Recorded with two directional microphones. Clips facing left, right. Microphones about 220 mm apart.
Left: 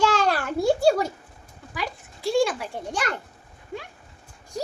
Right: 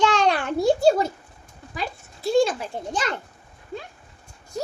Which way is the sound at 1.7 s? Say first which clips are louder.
Right 1 dB; 10° left (ahead or behind).